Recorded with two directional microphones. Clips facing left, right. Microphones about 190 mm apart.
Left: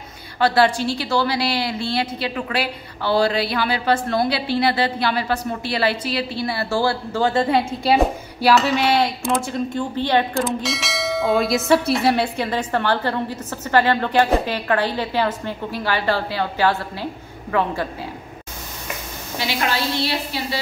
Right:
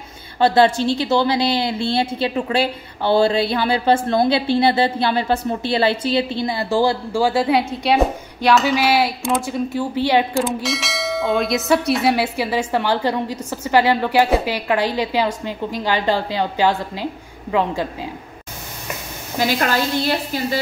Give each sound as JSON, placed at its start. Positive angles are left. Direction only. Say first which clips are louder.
{"t": 0.4, "sound": "a woman's voice", "louder": "right 3 dB", "side_deg": -25}
{"t": 19.3, "sound": "a woman's voice", "louder": "right 4 dB", "side_deg": -45}